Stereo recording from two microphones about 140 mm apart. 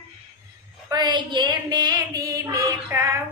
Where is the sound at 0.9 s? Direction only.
30° right (ahead or behind).